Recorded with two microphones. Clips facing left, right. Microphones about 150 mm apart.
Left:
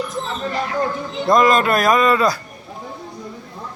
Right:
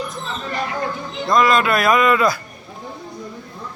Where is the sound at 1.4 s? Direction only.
45° left (ahead or behind).